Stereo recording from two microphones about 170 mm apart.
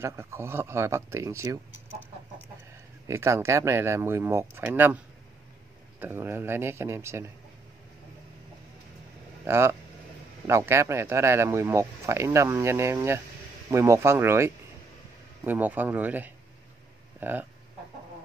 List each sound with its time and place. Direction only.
0.0 s speech: 15° right (ahead or behind)
3.1 s speech: 15° right (ahead or behind)
9.4 s speech: 15° right (ahead or behind)